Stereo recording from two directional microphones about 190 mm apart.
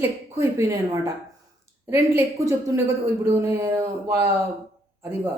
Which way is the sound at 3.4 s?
15° right (ahead or behind).